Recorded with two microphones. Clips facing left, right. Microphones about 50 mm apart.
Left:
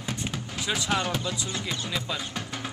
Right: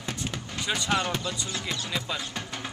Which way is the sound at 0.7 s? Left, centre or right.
Centre.